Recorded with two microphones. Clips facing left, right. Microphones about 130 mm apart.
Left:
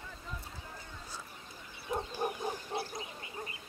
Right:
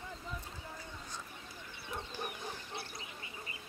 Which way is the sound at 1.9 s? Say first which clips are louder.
Left 8 dB; 40° left (ahead or behind).